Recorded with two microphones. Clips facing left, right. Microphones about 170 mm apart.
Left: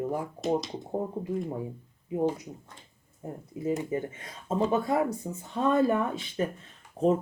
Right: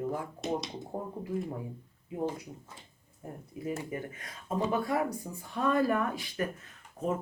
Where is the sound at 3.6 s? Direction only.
20° left (ahead or behind).